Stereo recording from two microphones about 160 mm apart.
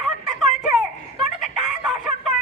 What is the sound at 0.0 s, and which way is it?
Fowl, 5° right (ahead or behind).